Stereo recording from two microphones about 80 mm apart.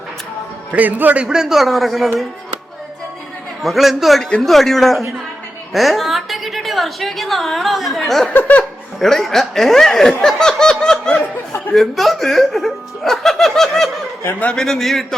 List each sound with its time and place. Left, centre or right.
0.7 s a man's voice: right; by 2.2 s centre
3.6 s a woman's voice: centre
8.3 s speech: left
9.0 s speech: centre
14.3 s speech: centre
14.5 s speech: centre